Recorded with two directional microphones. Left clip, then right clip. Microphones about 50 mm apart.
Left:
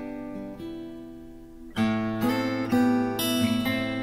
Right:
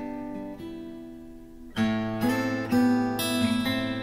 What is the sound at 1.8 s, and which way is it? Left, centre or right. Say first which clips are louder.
Music: left 1 dB; left.